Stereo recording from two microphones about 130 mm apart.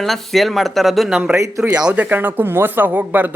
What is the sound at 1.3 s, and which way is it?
Speech, 20° right (ahead or behind).